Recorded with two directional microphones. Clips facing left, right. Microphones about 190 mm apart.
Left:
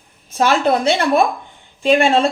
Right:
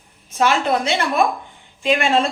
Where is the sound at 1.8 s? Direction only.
35° left (ahead or behind).